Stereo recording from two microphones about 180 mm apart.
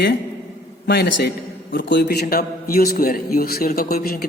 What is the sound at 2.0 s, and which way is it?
A man's voice, 60° left (ahead or behind).